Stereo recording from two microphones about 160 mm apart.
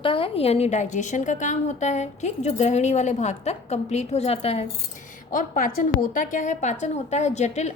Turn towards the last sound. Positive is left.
turn(degrees=45)  # may be behind; listen again after turning